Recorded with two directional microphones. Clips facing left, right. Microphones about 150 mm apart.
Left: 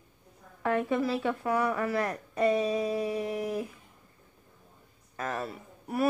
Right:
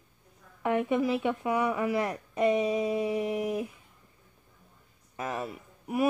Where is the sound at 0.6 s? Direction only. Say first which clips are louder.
Right 1 dB; 15° right (ahead or behind).